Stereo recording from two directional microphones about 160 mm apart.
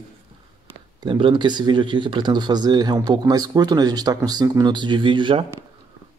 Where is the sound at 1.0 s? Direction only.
30° right (ahead or behind).